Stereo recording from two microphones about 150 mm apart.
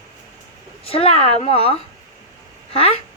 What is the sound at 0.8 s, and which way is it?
Speech, 40° left (ahead or behind).